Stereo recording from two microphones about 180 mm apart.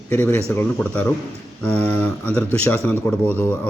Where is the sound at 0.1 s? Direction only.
10° left (ahead or behind).